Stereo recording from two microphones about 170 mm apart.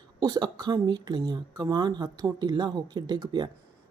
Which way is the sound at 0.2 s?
25° right (ahead or behind).